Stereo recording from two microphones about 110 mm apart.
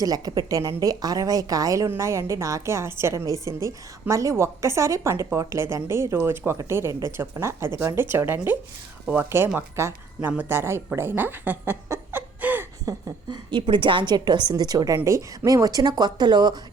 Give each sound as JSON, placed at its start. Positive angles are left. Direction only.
{"t": 0.0, "sound": "a woman's voice", "side_deg": -35}
{"t": 10.9, "sound": "chuckle", "side_deg": -20}
{"t": 12.8, "sound": "a sound", "side_deg": -30}
{"t": 13.5, "sound": "a woman's voice", "side_deg": -50}